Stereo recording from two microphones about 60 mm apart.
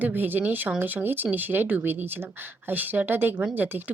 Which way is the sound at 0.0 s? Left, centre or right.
Right.